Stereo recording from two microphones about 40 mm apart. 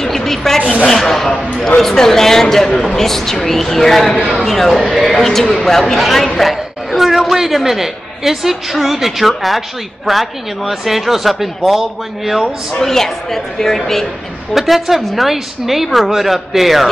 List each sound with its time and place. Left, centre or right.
0.0 s a sound: centre
0.6 s speech: left
0.8 s speech: centre
12.8 s speech: centre
14.5 s speech: centre